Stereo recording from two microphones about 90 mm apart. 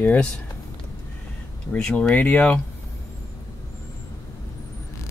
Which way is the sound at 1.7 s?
5° left (ahead or behind).